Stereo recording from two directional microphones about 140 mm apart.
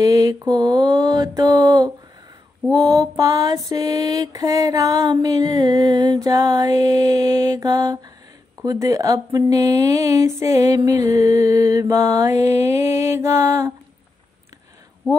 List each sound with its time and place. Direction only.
0.0 s mantra: 25° right (ahead or behind)